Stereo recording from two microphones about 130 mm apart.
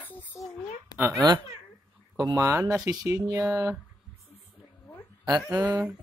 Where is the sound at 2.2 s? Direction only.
25° right (ahead or behind).